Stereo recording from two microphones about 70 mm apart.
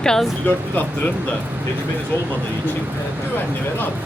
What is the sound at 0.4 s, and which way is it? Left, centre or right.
Speech, left.